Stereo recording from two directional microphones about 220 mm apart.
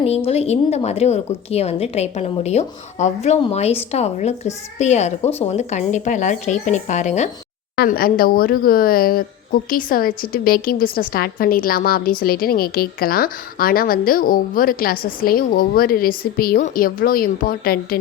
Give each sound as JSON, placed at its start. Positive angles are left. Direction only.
{"t": 0.3, "sound": "a woman's voice", "side_deg": 30}
{"t": 7.8, "sound": "a woman's voice", "side_deg": 40}